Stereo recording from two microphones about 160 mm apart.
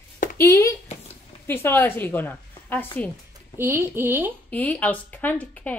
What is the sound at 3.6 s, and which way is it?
Speech, 15° right (ahead or behind).